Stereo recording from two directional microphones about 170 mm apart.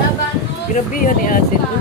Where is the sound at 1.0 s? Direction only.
55° left (ahead or behind).